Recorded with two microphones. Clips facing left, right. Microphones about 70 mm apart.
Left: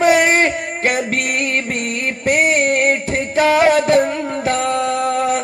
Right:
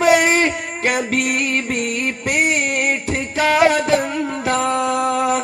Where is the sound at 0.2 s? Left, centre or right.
Left.